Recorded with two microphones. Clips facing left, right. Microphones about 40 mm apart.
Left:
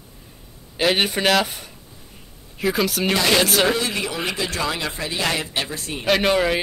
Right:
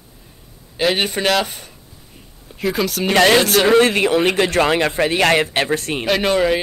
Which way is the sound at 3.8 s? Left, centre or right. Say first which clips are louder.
Right 11 dB; right.